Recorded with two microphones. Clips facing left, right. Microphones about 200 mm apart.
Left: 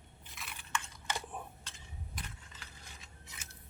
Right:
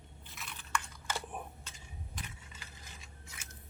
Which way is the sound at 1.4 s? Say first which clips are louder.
Right 1 dB; 20° right (ahead or behind).